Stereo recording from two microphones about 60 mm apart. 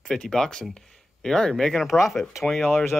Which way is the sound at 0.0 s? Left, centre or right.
Centre.